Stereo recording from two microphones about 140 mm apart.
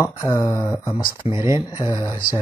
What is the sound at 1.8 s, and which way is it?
Speech, 25° left (ahead or behind).